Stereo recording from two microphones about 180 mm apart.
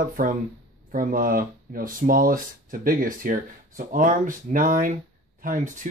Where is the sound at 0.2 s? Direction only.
50° right (ahead or behind).